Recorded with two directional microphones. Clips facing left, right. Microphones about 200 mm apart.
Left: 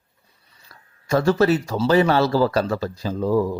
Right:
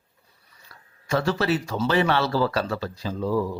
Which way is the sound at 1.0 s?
45° left (ahead or behind).